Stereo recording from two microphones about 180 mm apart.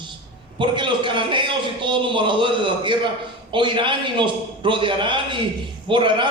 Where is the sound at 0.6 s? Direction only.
25° right (ahead or behind).